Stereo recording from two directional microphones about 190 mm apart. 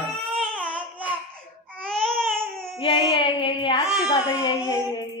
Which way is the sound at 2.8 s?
25° left (ahead or behind).